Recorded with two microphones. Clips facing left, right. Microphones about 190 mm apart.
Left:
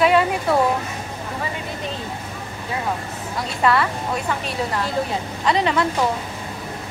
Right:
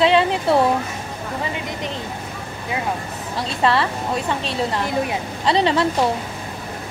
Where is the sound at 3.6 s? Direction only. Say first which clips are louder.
Even; 30° right (ahead or behind).